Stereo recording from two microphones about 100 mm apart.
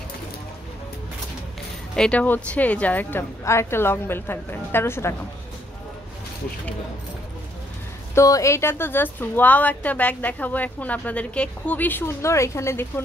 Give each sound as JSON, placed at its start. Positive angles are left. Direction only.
{"t": 2.0, "sound": "speech", "side_deg": 10}
{"t": 8.1, "sound": "speech", "side_deg": 30}